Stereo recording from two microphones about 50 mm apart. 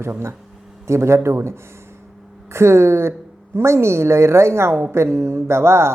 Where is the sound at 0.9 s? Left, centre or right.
Right.